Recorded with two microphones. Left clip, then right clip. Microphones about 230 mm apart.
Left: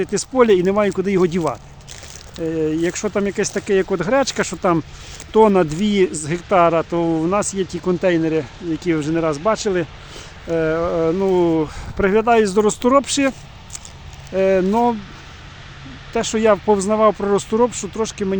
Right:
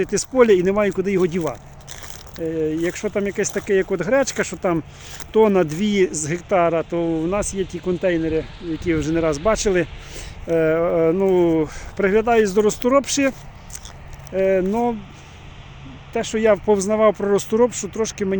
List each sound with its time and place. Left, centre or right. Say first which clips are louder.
0.0 s speech: even; centre
16.1 s speech: left 2 dB; centre